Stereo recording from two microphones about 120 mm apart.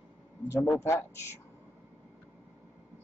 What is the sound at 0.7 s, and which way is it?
Speech, 25° left (ahead or behind).